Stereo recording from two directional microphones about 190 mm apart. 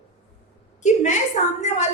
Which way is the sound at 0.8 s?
40° left (ahead or behind).